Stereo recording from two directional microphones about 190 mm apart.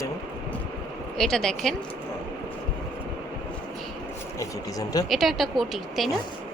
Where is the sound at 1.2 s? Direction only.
5° left (ahead or behind).